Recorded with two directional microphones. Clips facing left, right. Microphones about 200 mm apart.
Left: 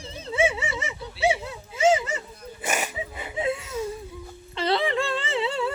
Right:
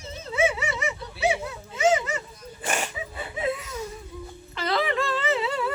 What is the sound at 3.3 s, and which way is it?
Wheeze, 25° left (ahead or behind).